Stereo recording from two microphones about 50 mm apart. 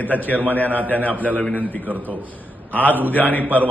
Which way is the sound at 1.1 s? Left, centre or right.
Right.